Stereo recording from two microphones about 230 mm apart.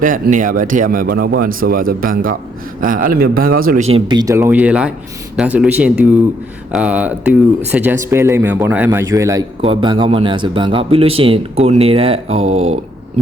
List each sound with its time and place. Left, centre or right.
0.0 s speech: right
3.9 s speech: centre